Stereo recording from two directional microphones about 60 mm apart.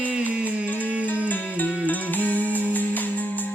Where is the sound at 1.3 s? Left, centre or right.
Left.